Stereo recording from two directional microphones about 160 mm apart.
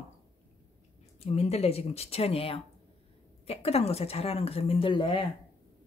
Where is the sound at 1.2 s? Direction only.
40° left (ahead or behind).